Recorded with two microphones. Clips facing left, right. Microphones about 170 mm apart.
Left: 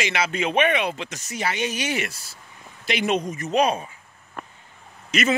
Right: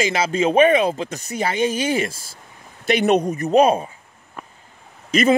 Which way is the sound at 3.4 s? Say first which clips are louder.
Right 6 dB; 50° right (ahead or behind).